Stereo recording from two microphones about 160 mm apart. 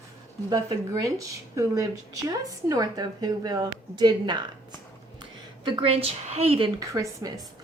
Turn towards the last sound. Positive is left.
turn(degrees=-25)  # may be behind; listen again after turning